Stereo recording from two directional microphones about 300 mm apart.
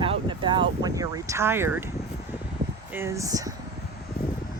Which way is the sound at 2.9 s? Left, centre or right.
Centre.